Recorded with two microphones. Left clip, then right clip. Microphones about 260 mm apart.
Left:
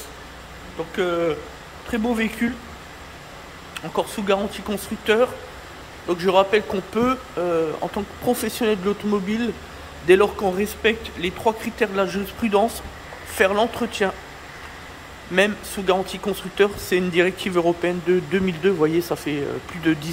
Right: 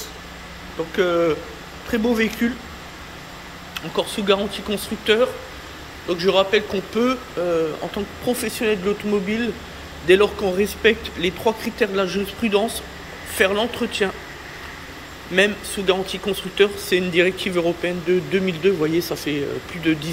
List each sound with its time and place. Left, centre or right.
0.9 s a man's voice: centre
3.7 s a man's voice: centre
15.3 s a man's voice: centre